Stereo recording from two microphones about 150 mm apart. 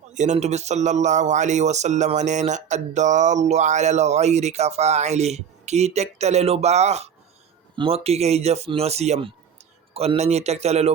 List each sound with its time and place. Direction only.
0.1 s speech: 50° right (ahead or behind)